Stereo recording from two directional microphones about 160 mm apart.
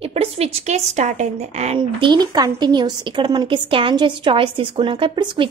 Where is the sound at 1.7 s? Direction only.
30° right (ahead or behind).